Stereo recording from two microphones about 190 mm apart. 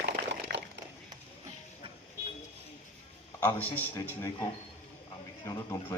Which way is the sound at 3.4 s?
10° left (ahead or behind).